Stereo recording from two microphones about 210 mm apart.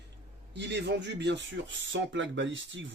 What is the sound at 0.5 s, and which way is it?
Speech, 55° right (ahead or behind).